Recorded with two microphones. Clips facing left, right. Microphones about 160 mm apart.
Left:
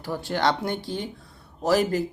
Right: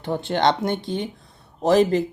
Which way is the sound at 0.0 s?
25° right (ahead or behind).